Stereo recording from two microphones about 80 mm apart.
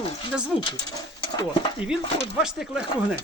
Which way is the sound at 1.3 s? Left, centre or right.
Left.